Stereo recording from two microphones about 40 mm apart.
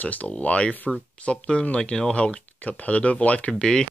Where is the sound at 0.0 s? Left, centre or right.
Left; by 2.0 s centre.